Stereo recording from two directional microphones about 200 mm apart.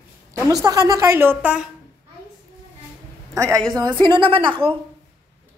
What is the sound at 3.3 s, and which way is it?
A woman's voice, 15° right (ahead or behind).